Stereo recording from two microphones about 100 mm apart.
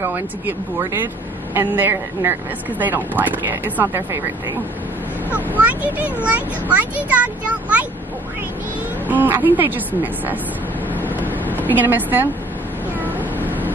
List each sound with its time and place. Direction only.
0.0 s speech: 20° right (ahead or behind)
5.3 s speech: 15° right (ahead or behind)
9.0 s speech: 15° right (ahead or behind)
11.5 s a woman's voice: 20° right (ahead or behind)